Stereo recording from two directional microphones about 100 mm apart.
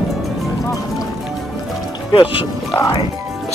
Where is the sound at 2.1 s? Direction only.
50° left (ahead or behind).